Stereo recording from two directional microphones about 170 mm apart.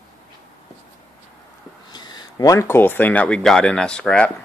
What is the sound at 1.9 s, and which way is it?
Speech, 25° left (ahead or behind).